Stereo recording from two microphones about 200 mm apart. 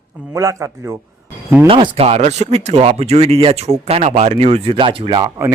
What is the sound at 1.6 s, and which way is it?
Speech, 25° right (ahead or behind).